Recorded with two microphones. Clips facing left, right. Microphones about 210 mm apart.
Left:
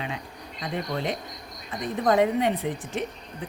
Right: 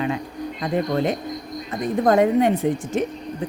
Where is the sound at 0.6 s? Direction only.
45° right (ahead or behind).